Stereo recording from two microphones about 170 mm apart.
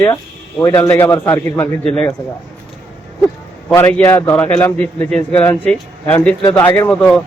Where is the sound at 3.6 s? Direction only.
15° left (ahead or behind).